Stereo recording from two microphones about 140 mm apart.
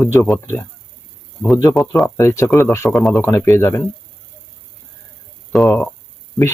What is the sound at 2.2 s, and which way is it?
Speech, 20° left (ahead or behind).